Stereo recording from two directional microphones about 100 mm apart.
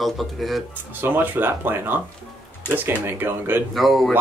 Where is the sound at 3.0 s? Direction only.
25° right (ahead or behind).